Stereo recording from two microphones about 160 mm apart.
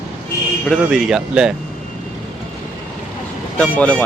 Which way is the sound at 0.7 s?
Centre (ahead or behind).